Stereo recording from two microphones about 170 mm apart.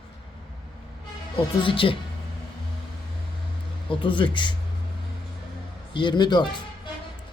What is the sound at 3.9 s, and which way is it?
Speech, 30° left (ahead or behind).